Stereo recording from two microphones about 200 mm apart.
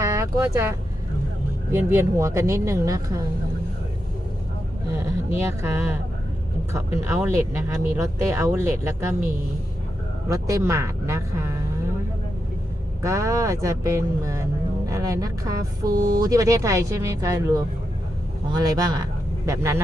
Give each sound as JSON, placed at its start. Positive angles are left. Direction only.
{"t": 0.0, "sound": "vehicle", "side_deg": -15}
{"t": 1.7, "sound": "speech", "side_deg": -15}
{"t": 5.3, "sound": "speech", "side_deg": -15}
{"t": 10.2, "sound": "speech", "side_deg": -15}
{"t": 13.0, "sound": "speech", "side_deg": -15}